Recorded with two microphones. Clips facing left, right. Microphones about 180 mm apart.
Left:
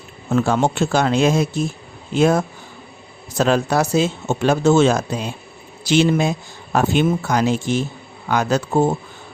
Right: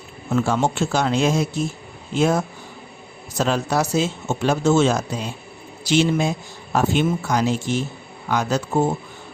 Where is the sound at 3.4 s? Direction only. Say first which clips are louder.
Left 4 dB; 60° left (ahead or behind).